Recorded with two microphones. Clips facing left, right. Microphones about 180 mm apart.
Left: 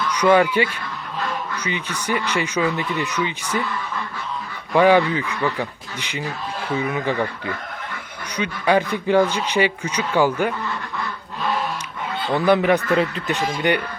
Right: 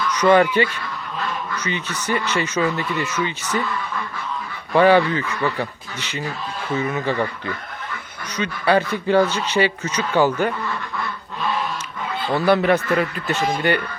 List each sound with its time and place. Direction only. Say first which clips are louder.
0.1 s speech: right 1 dB; 10° left (ahead or behind)
4.7 s speech: even; 15° left (ahead or behind)
8.4 s speech: even; 15° left (ahead or behind)
12.3 s speech: even; 15° left (ahead or behind)